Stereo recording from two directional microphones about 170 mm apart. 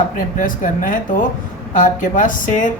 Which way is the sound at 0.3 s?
50° left (ahead or behind).